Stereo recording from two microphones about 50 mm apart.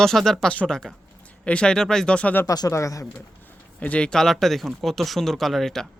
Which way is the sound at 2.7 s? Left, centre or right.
Left.